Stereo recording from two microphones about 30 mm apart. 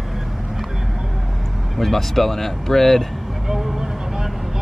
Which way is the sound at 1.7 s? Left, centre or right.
Centre.